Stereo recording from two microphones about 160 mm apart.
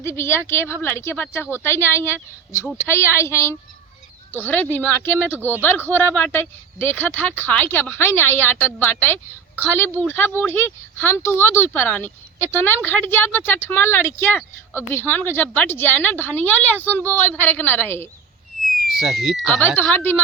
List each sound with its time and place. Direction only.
0.0 s speech: 15° left (ahead or behind)
18.9 s speech: centre (ahead or behind)
19.5 s speech: 10° left (ahead or behind)